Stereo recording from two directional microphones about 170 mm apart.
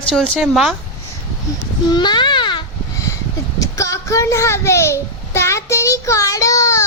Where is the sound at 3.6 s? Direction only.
20° left (ahead or behind).